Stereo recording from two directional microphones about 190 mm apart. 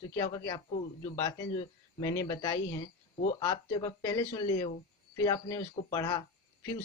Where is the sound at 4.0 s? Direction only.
20° left (ahead or behind).